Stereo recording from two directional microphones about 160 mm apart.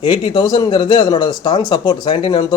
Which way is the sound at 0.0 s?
30° left (ahead or behind).